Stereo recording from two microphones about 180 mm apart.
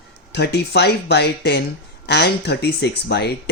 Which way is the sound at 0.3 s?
70° left (ahead or behind).